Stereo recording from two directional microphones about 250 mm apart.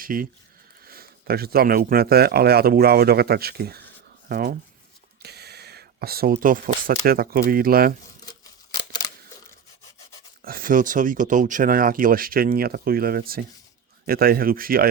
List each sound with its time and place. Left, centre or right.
0.0 s a man's voice: right
10.4 s a man's voice: right